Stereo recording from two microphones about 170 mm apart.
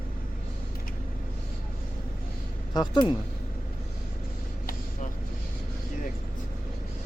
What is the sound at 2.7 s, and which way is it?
Speech, 25° left (ahead or behind).